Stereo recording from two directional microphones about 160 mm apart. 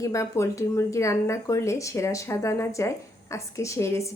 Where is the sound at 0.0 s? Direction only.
20° left (ahead or behind).